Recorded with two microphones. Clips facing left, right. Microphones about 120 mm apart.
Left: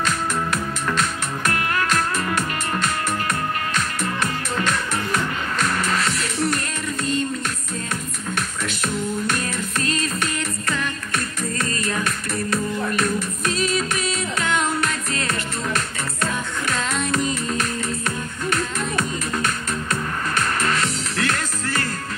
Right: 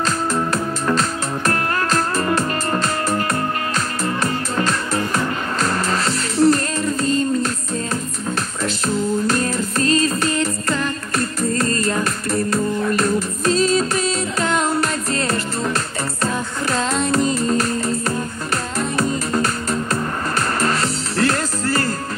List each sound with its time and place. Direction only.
0.0 s music: 35° right (ahead or behind)
8.6 s music: 35° right (ahead or behind)